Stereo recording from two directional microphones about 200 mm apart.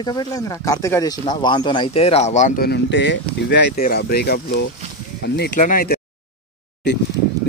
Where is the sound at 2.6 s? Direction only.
60° left (ahead or behind).